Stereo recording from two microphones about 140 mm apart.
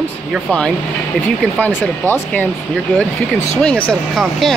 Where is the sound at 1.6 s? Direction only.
10° left (ahead or behind).